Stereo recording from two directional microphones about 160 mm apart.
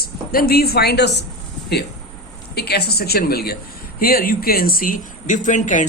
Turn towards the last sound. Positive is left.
turn(degrees=50)  # may be behind; listen again after turning